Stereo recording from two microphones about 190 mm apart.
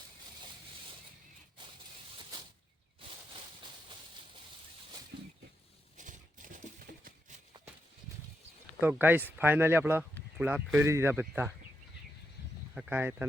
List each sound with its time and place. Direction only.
6.0 s a sound: 40° right (ahead or behind)
8.8 s speech: 10° right (ahead or behind)
12.7 s speech: 10° right (ahead or behind)